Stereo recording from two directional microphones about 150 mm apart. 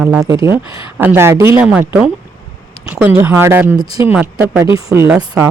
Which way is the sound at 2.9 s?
10° right (ahead or behind).